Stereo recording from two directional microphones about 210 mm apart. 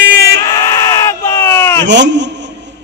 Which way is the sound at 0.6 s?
15° left (ahead or behind).